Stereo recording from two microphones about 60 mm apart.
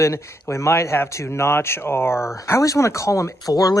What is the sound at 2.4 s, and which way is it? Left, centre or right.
Speech, left.